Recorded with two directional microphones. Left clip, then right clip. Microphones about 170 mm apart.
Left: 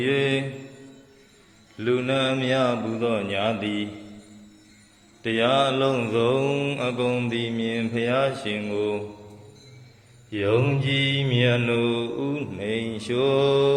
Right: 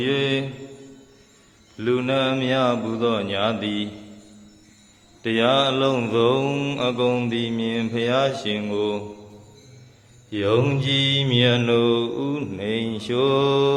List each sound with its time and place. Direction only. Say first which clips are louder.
0.0 s mantra: right 1 dB; 15° right (ahead or behind)
1.7 s mantra: right 2 dB; 20° right (ahead or behind)
5.2 s mantra: right 2 dB; 20° right (ahead or behind)
10.2 s mantra: right 2 dB; 25° right (ahead or behind)